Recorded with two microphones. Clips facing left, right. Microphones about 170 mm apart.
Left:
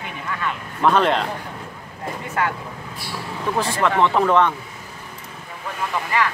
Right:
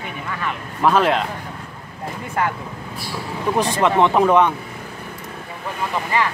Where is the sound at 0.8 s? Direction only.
5° right (ahead or behind).